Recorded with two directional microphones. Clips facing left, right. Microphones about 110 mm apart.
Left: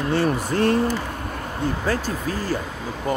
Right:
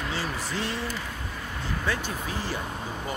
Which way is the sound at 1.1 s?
55° left (ahead or behind).